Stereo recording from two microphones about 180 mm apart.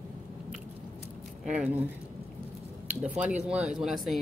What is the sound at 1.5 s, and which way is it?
Speech, 5° right (ahead or behind).